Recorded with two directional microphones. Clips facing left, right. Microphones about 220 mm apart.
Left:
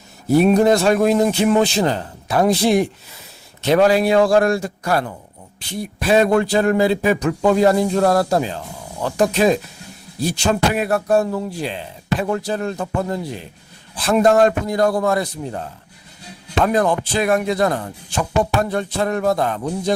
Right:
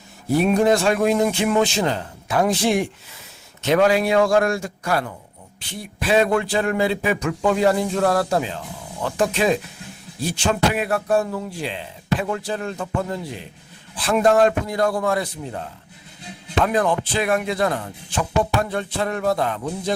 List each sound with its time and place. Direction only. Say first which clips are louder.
0.4 s speech: left 2 dB; 40° left (ahead or behind)
16.6 s speech: left 4 dB; 40° left (ahead or behind)